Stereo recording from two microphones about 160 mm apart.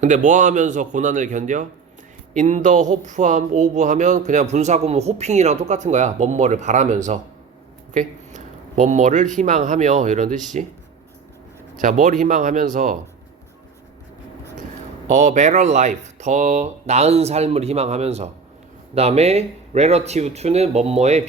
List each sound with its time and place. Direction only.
0.0 s speech: 50° right (ahead or behind)
11.8 s speech: 55° right (ahead or behind)
15.1 s speech: 50° right (ahead or behind)